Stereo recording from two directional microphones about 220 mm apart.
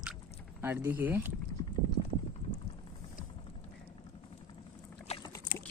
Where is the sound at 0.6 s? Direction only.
10° right (ahead or behind).